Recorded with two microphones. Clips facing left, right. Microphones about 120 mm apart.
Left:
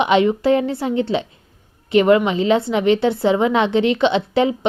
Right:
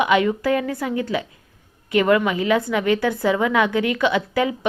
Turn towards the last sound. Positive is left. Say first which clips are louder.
# left 4 dB
turn(degrees=25)  # may be behind; listen again after turning